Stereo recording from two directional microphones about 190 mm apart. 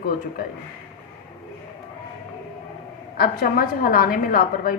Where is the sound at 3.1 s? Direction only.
55° left (ahead or behind).